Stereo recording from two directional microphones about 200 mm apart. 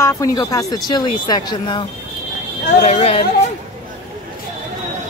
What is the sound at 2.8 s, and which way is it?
Speech, 30° left (ahead or behind).